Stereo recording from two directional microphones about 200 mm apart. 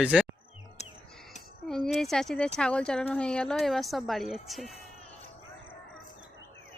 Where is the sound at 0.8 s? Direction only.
35° left (ahead or behind).